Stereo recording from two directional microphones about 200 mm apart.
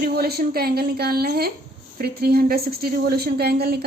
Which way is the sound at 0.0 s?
50° right (ahead or behind).